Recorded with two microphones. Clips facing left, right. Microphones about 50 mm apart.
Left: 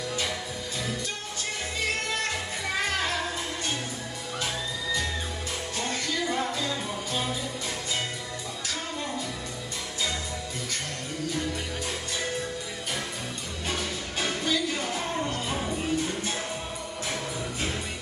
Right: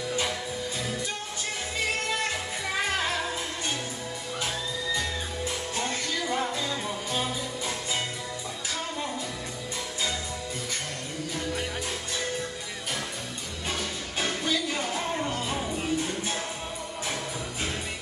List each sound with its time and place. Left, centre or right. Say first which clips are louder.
1.9 s music: even; centre
5.8 s music: left 2 dB; centre
13.7 s music: left 1 dB; centre